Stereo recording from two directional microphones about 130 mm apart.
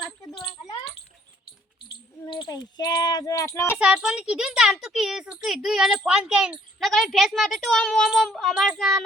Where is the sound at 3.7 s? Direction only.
5° right (ahead or behind).